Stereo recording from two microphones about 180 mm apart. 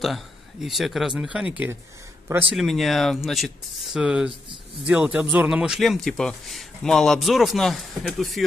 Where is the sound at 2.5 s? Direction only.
Centre (ahead or behind).